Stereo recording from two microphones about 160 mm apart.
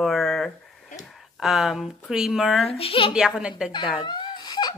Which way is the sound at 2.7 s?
40° left (ahead or behind).